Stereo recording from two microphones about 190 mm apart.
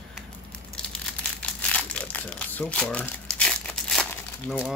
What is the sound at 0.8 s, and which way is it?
Crumpling, 5° left (ahead or behind).